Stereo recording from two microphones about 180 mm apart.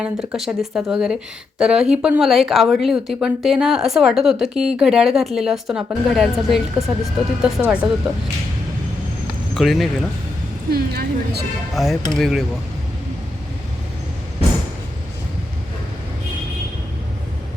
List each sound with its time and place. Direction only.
0.0 s speech: 5° right (ahead or behind)
9.6 s speech: centre (ahead or behind)
10.7 s speech: 60° right (ahead or behind)
11.7 s speech: centre (ahead or behind)